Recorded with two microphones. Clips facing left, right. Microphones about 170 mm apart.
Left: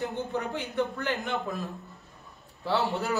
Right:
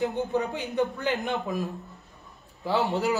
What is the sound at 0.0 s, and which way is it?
A man's voice, 15° right (ahead or behind).